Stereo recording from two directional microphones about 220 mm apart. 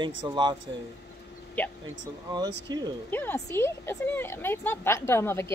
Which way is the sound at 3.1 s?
10° left (ahead or behind).